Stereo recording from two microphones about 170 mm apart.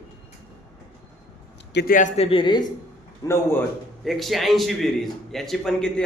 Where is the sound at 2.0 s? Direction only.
40° left (ahead or behind); by 3.4 s 20° left (ahead or behind).